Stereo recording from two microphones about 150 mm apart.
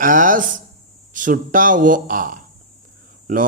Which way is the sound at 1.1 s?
60° right (ahead or behind).